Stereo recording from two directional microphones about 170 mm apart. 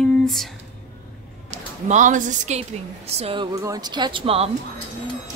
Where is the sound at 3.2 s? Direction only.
35° right (ahead or behind).